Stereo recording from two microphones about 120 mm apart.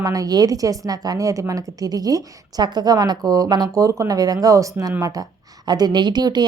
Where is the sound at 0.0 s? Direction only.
30° right (ahead or behind).